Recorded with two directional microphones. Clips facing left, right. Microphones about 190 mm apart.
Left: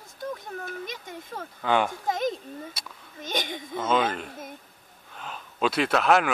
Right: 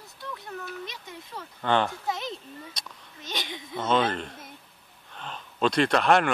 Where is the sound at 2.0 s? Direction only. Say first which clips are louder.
Left 5 dB; 45° left (ahead or behind).